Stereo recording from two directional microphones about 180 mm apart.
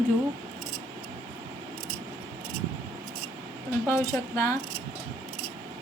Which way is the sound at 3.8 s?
15° left (ahead or behind).